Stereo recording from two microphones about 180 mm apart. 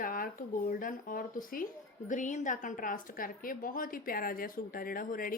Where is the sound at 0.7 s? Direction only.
50° left (ahead or behind).